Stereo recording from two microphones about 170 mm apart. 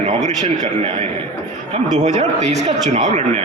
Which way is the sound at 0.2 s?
45° right (ahead or behind).